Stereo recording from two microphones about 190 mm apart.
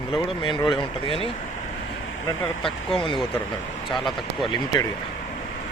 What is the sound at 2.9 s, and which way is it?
Speech, 25° left (ahead or behind).